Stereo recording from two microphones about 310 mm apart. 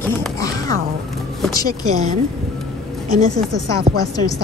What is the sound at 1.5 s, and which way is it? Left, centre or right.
Speech, centre.